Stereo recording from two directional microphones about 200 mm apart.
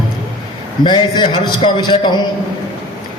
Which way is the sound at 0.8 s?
20° left (ahead or behind).